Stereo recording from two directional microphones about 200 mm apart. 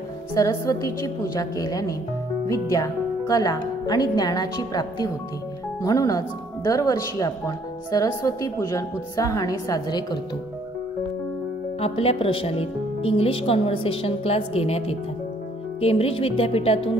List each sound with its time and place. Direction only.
0.4 s a woman's voice: 20° left (ahead or behind)
11.8 s a woman's voice: 30° left (ahead or behind)